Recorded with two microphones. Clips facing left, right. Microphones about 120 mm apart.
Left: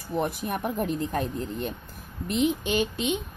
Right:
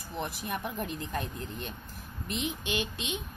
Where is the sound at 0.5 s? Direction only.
40° left (ahead or behind).